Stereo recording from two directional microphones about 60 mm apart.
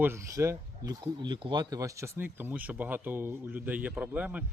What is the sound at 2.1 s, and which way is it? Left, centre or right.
Speech, right.